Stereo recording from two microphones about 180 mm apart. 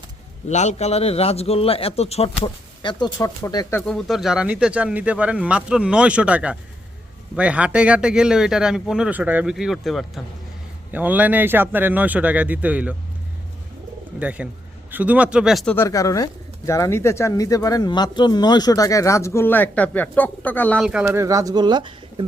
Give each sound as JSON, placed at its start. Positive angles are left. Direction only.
{"t": 0.4, "sound": "a man's voice", "side_deg": 40}
{"t": 3.8, "sound": "speech", "side_deg": 5}
{"t": 14.2, "sound": "speech", "side_deg": -10}
{"t": 15.7, "sound": "speech", "side_deg": 15}
{"t": 21.0, "sound": "speech", "side_deg": -15}